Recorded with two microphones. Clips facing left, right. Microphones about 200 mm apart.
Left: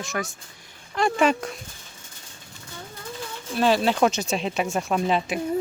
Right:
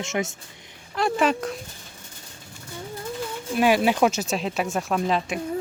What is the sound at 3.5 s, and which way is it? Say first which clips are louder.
Speech: right 1 dB; 10° right (ahead or behind).